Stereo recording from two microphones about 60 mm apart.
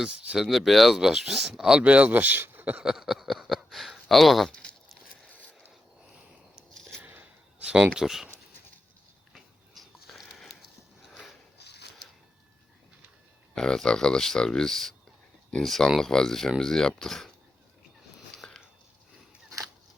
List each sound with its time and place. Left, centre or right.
0.0 s speech: centre
0.3 s speech: centre
1.8 s speech: right
2.4 s a sound: right
2.8 s speech: centre
5.3 s mechanisms: left
7.6 s speech: centre
9.3 s sniff: centre
13.6 s speech: centre
18.4 s biting: centre